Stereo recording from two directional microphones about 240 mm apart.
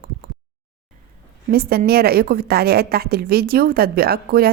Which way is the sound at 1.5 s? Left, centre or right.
Right.